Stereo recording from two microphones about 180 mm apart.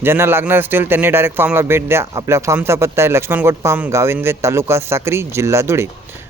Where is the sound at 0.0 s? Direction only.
15° right (ahead or behind).